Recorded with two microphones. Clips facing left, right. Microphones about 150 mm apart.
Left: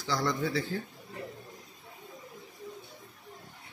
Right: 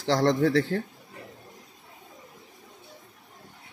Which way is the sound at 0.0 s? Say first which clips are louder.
Right 8 dB; 80° right.